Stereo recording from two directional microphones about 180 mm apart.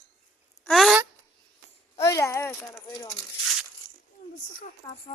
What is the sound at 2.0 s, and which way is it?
Speech, 15° left (ahead or behind).